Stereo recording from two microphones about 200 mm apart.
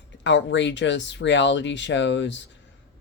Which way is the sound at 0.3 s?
65° left (ahead or behind).